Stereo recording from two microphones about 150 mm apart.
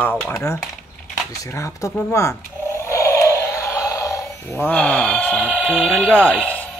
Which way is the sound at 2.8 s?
20° left (ahead or behind).